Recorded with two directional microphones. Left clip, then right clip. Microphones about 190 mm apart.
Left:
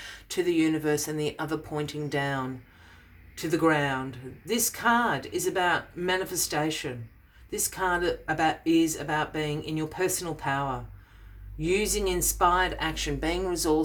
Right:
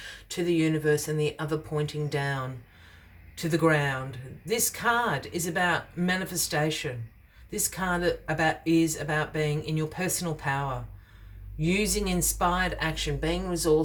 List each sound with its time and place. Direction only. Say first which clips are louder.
0.0 s speech: left 2 dB; 30° left (ahead or behind)